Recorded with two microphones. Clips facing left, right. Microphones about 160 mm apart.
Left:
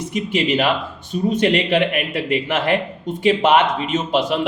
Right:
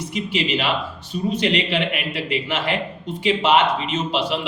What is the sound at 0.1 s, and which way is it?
A man's voice, 50° left (ahead or behind).